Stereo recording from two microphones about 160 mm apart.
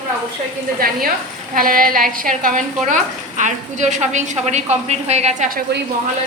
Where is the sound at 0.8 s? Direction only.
65° right (ahead or behind); by 5.6 s 50° right (ahead or behind).